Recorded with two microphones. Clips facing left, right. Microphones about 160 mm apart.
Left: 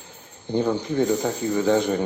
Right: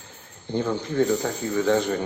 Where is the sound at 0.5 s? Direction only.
15° left (ahead or behind).